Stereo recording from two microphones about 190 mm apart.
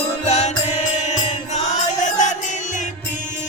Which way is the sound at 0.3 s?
35° left (ahead or behind).